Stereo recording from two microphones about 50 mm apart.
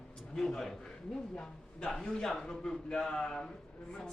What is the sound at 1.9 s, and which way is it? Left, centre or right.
Speech, centre.